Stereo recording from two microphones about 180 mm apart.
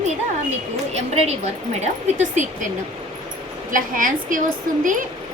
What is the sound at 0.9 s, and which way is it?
A woman's voice, 35° right (ahead or behind).